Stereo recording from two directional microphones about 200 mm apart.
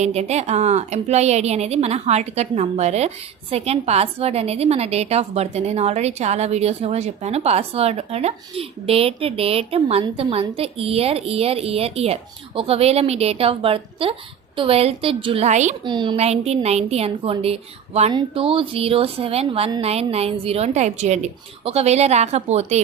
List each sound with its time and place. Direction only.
0.0 s a woman's voice: 35° right (ahead or behind)
15.8 s a woman's voice: 25° right (ahead or behind)